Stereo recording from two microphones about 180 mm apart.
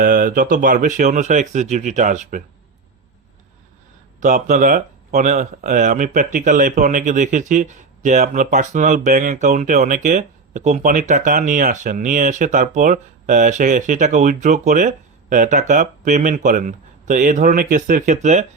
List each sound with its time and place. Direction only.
0.0 s speech: 50° right (ahead or behind)
4.2 s speech: 45° right (ahead or behind)